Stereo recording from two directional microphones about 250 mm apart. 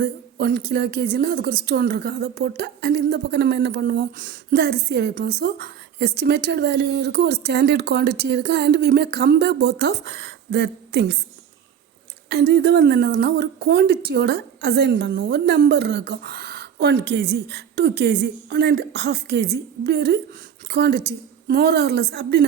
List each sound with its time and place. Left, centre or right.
0.0 s speech: right
12.3 s speech: right